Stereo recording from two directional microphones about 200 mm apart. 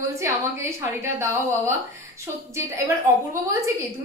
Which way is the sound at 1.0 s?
15° right (ahead or behind).